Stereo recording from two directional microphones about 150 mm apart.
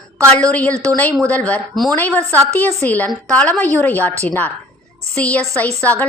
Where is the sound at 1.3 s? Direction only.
10° left (ahead or behind).